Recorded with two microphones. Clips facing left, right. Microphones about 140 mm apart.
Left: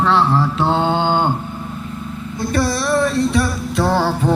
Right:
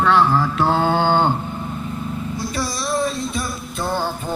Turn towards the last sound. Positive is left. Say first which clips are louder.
# left 7 dB
turn(degrees=90)